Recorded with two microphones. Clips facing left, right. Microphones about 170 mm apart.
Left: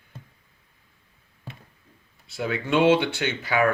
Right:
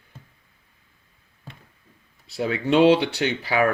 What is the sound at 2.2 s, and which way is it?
Speech, 35° right (ahead or behind).